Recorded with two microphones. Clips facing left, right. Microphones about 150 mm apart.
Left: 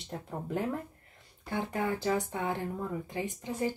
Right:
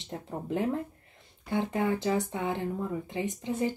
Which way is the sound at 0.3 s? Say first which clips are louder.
Right 3 dB; 20° right (ahead or behind).